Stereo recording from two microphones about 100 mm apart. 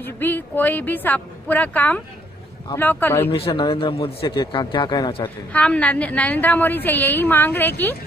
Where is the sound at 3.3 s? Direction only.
65° left (ahead or behind).